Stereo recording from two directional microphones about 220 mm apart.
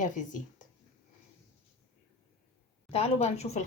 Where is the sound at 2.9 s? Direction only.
30° left (ahead or behind).